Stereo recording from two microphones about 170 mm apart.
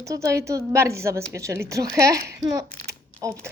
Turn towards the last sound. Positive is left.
turn(degrees=-20)  # may be behind; listen again after turning